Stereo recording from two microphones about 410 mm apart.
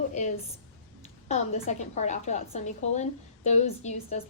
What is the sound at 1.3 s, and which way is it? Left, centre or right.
A woman's voice, centre.